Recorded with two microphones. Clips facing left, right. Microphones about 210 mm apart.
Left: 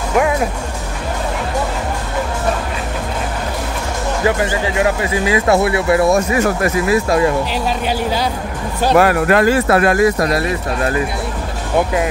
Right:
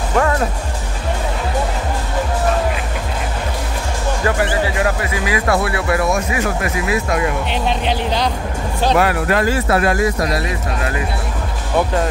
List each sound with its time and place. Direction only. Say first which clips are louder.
0.1 s music: left 2 dB; 15° left (ahead or behind)
4.4 s speech: left 1 dB; 25° left (ahead or behind)
6.1 s speech: left 5 dB; 40° left (ahead or behind)
8.9 s speech: left 5 dB; 50° left (ahead or behind)